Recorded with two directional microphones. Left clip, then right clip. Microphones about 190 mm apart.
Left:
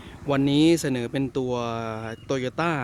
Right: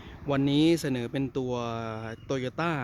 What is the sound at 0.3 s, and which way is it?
Speech, 5° left (ahead or behind).